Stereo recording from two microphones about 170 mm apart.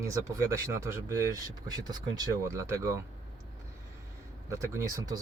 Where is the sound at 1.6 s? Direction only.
20° right (ahead or behind).